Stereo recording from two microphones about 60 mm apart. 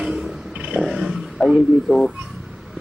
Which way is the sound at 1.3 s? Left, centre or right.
Centre.